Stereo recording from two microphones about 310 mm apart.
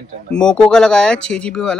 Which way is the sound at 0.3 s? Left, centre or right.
Centre.